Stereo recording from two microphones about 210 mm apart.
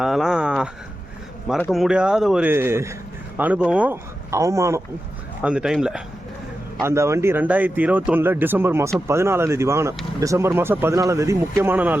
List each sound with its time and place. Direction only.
0.0 s a sound: centre (ahead or behind)
1.5 s speech: 5° left (ahead or behind)
6.8 s speech: 15° right (ahead or behind)